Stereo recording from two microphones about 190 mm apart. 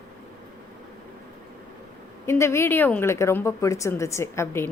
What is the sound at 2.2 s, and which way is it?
A woman's voice, 15° left (ahead or behind).